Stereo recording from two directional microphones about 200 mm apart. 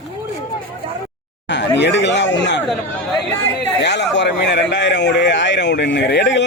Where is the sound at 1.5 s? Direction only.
60° left (ahead or behind).